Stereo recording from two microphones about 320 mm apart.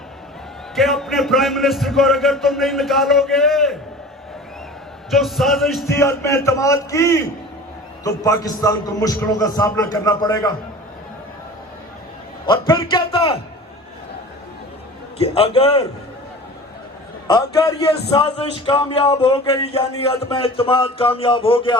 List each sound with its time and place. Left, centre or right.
0.8 s a man's voice: centre
5.1 s a man's voice: centre
12.5 s a man's voice: centre
15.2 s a man's voice: centre
17.2 s a man's voice: centre